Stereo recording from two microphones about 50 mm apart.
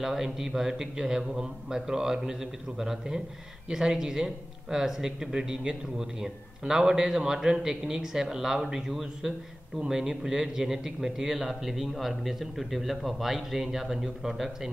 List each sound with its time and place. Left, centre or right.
0.0 s a man's voice: centre